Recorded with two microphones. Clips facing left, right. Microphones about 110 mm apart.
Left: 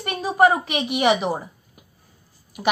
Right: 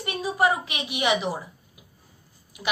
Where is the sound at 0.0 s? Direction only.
55° left (ahead or behind).